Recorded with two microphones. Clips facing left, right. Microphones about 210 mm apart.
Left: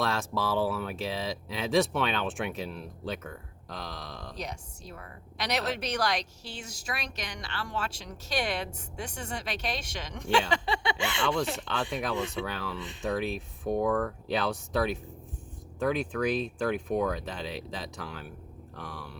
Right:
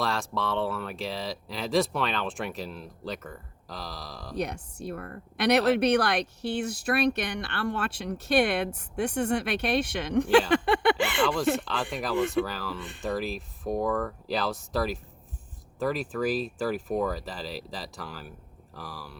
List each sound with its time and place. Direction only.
0.0 s speech: centre (ahead or behind)
4.4 s a woman's voice: 60° right (ahead or behind)
11.6 s speech: centre (ahead or behind)